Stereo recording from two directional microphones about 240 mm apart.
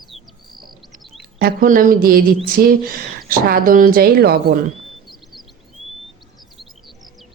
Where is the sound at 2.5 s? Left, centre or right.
Right.